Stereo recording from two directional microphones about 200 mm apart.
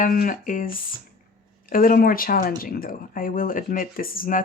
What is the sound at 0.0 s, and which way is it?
Speech, 45° left (ahead or behind).